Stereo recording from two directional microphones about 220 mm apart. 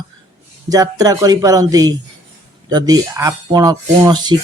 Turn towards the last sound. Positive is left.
turn(degrees=-20)  # may be behind; listen again after turning